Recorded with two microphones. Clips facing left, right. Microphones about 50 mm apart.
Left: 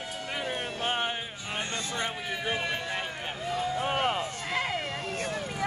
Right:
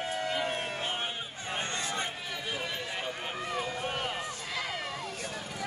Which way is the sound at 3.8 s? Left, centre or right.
Left.